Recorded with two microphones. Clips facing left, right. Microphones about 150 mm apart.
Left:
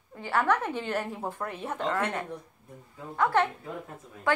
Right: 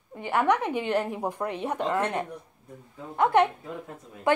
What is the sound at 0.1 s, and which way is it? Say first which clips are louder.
A woman's voice: right 2 dB; 20° right (ahead or behind).